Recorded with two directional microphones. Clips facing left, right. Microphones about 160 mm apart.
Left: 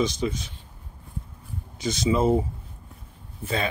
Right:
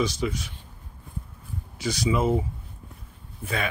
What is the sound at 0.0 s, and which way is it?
Speech, 20° left (ahead or behind).